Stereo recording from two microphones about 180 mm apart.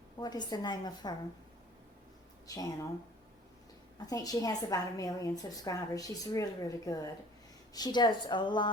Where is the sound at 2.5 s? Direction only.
20° left (ahead or behind).